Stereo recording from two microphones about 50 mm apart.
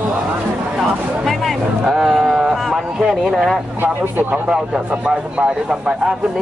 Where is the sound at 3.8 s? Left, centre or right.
Right.